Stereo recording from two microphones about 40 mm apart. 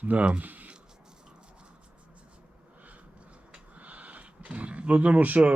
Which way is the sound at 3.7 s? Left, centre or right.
Right.